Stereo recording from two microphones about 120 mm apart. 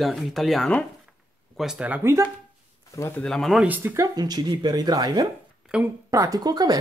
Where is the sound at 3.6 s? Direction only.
15° right (ahead or behind).